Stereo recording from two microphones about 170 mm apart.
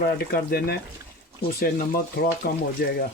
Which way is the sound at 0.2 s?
65° left (ahead or behind).